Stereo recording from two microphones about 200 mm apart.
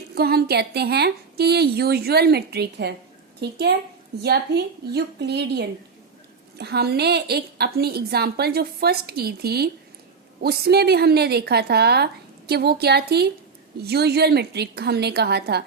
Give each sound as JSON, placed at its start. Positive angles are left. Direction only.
{"t": 0.1, "sound": "a woman's voice", "side_deg": -50}